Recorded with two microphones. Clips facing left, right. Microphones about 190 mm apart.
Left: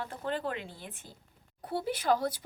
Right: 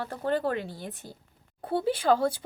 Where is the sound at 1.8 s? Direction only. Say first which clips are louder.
Right 5 dB; 30° right (ahead or behind).